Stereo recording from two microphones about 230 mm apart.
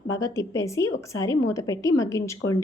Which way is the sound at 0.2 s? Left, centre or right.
Centre.